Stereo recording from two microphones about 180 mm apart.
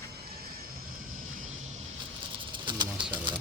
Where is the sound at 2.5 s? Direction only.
25° right (ahead or behind).